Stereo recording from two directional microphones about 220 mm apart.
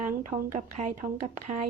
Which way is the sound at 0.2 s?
35° right (ahead or behind).